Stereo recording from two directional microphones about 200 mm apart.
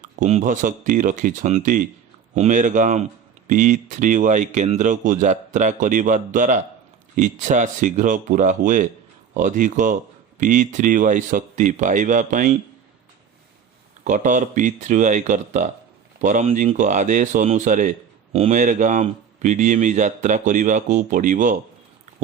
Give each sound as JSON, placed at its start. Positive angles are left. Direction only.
{"t": 0.0, "sound": "speech", "side_deg": -35}
{"t": 14.0, "sound": "speech", "side_deg": -40}